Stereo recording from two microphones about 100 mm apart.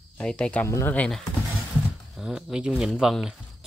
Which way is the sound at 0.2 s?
10° left (ahead or behind).